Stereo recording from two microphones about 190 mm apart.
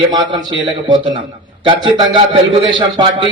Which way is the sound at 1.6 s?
25° right (ahead or behind).